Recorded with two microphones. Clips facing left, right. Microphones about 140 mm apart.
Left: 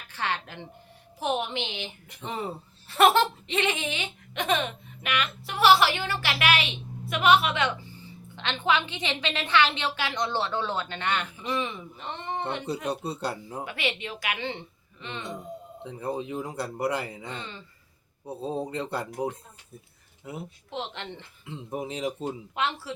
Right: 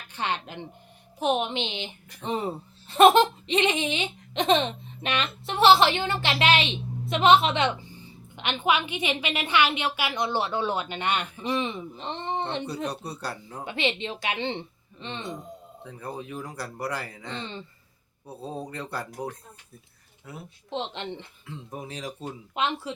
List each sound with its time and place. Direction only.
0.1 s a woman's voice: 20° right (ahead or behind)
12.6 s speech: 25° left (ahead or behind)
13.7 s speech: 25° right (ahead or behind)
15.8 s speech: 20° left (ahead or behind)
17.3 s speech: 25° right (ahead or behind)
18.3 s speech: 25° left (ahead or behind)
20.7 s speech: 20° right (ahead or behind)
21.4 s speech: 20° left (ahead or behind)
22.5 s speech: 20° right (ahead or behind)